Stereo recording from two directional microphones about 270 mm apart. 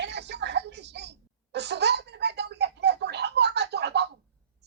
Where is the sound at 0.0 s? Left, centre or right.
Right.